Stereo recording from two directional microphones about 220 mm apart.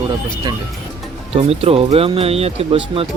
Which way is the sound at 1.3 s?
25° right (ahead or behind).